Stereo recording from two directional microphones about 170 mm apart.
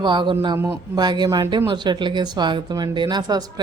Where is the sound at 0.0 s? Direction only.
25° right (ahead or behind).